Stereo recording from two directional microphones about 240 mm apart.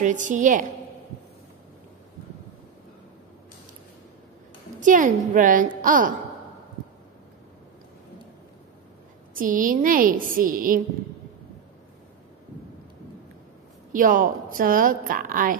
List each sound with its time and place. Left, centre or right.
0.0 s a woman's voice: right
4.7 s a woman's voice: right
9.3 s a woman's voice: right
13.9 s a woman's voice: right